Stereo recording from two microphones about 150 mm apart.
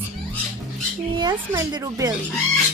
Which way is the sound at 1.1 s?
30° right (ahead or behind).